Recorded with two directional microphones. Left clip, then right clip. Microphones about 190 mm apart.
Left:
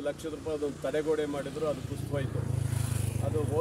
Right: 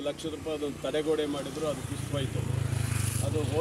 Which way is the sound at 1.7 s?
30° right (ahead or behind).